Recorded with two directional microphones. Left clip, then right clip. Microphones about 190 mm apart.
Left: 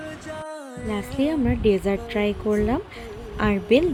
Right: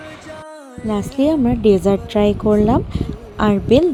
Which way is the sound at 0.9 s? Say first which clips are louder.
Right 8 dB; 30° right (ahead or behind).